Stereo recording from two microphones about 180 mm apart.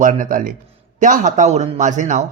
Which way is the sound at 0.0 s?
45° right (ahead or behind).